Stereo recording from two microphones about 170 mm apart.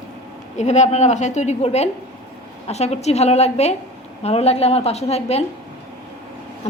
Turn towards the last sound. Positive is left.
turn(degrees=40)  # may be behind; listen again after turning